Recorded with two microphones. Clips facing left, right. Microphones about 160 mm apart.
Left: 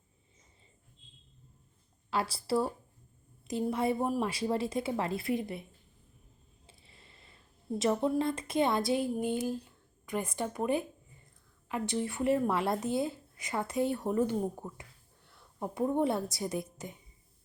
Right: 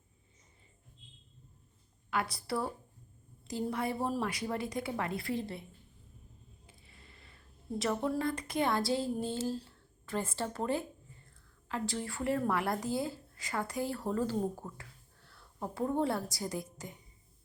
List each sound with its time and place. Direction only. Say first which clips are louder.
2.0 s a woman's voice: left 3 dB; 30° left (ahead or behind)
6.7 s a sound: left 2 dB; 25° left (ahead or behind)
7.8 s a woman's voice: left 4 dB; 20° left (ahead or behind)